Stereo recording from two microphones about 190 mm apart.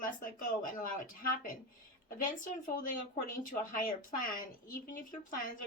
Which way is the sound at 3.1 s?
45° left (ahead or behind).